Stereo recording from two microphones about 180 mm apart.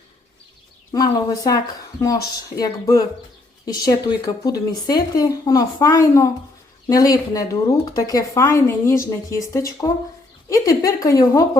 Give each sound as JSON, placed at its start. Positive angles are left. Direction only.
{"t": 0.9, "sound": "a woman's voice", "side_deg": 20}